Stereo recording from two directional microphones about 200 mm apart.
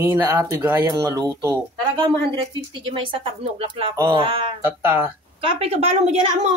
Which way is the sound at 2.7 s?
25° right (ahead or behind).